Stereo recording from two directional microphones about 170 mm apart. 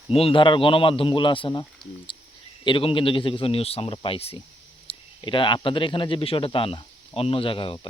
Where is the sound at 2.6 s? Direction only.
30° left (ahead or behind).